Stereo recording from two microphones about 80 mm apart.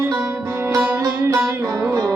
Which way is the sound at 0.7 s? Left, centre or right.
Right.